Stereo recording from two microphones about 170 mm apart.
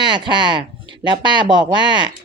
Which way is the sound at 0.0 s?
25° right (ahead or behind).